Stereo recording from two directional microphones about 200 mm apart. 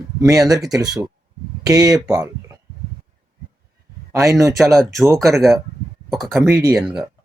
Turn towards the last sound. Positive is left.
turn(degrees=-5)  # may be behind; listen again after turning